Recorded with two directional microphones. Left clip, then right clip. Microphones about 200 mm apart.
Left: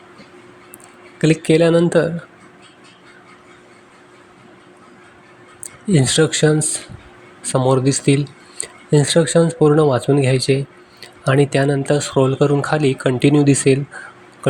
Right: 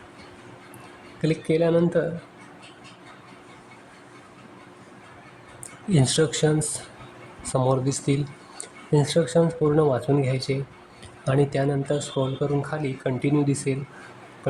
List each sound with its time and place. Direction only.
1.2 s speech: 25° left (ahead or behind)
5.9 s speech: 20° left (ahead or behind)
7.7 s speech: 20° left (ahead or behind)